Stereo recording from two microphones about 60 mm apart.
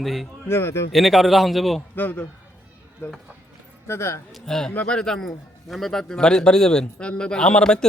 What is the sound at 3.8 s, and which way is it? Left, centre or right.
Speech, left.